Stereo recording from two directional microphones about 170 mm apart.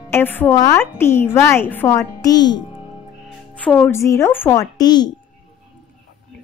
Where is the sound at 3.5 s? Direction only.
10° left (ahead or behind); by 5.1 s 25° left (ahead or behind).